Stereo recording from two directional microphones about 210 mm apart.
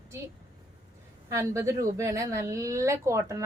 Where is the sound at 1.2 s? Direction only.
15° right (ahead or behind).